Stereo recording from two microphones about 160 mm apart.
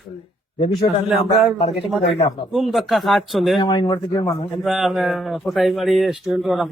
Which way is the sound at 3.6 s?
25° left (ahead or behind).